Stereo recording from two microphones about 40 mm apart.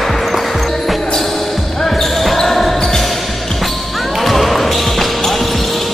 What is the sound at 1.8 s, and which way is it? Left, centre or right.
Basketball bounce, centre.